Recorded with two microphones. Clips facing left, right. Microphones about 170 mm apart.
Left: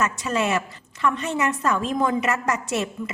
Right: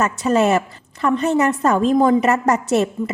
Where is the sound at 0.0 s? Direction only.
35° right (ahead or behind).